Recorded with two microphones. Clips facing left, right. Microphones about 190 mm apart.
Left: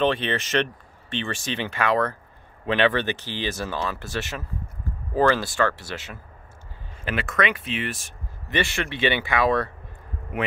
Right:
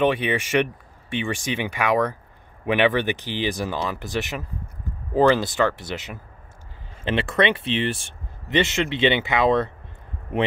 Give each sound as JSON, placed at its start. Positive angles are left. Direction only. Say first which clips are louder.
{"t": 0.0, "sound": "speech", "louder": "right 2 dB", "side_deg": -15}
{"t": 7.1, "sound": "speech", "louder": "right 4 dB", "side_deg": -30}